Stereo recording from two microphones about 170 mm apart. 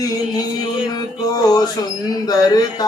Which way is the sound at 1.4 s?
20° left (ahead or behind).